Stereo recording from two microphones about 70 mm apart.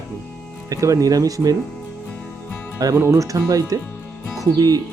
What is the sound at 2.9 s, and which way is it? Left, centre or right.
Speech, right.